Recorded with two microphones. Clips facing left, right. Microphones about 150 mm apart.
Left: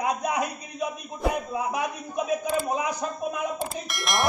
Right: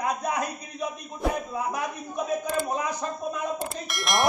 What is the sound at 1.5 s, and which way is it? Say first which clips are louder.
A man's voice: left 1 dB; 15° left (ahead or behind).